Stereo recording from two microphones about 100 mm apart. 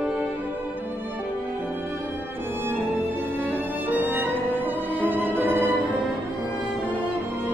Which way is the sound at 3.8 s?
20° right (ahead or behind).